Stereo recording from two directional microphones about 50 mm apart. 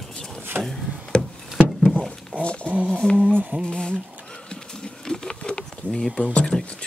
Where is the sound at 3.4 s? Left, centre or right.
Right.